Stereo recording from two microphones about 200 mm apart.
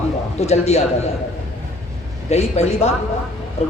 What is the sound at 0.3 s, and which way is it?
Speech, 35° left (ahead or behind).